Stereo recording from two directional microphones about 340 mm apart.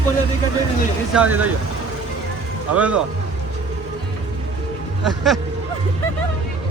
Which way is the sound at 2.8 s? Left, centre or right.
Centre.